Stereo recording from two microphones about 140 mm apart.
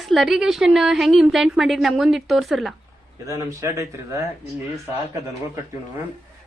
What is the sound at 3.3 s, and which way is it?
Speech, 20° right (ahead or behind).